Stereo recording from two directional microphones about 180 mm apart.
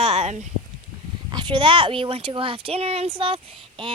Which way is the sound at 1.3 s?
25° right (ahead or behind).